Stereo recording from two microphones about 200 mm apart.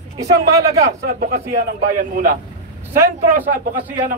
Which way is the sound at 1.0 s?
50° right (ahead or behind).